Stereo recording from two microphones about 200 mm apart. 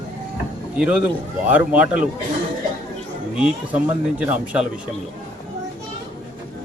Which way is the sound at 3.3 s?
5° right (ahead or behind).